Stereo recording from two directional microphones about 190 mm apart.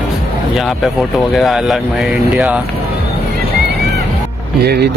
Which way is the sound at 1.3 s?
Centre (ahead or behind).